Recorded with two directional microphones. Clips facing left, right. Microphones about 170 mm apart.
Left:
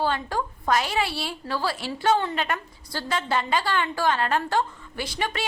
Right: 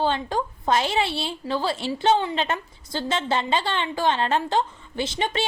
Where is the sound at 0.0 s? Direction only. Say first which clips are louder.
Right 2 dB; 20° right (ahead or behind).